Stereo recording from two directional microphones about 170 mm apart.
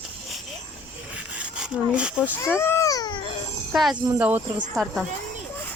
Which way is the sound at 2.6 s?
15° left (ahead or behind).